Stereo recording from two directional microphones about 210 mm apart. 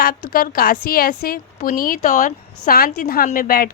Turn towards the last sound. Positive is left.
turn(degrees=45)  # may be behind; listen again after turning